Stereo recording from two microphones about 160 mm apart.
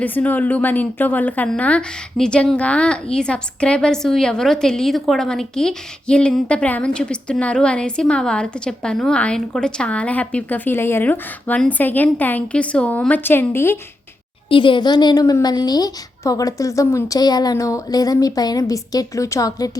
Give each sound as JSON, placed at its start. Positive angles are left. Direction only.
{"t": 0.0, "sound": "a woman's voice", "side_deg": 10}
{"t": 14.5, "sound": "a woman's voice", "side_deg": 30}